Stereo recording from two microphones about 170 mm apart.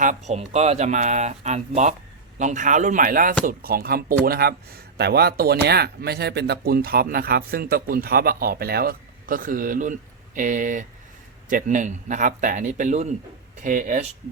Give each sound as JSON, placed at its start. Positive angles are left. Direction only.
{"t": 0.0, "sound": "a man's voice", "side_deg": -45}